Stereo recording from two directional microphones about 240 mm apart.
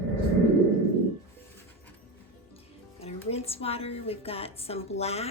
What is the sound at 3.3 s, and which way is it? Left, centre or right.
A woman's voice, left.